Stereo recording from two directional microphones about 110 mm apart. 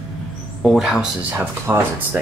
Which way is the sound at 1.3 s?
20° right (ahead or behind).